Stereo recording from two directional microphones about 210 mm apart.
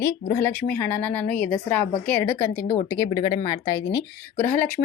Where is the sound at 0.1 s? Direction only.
10° left (ahead or behind).